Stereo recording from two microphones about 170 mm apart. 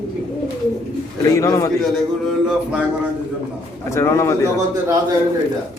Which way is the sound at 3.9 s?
15° left (ahead or behind).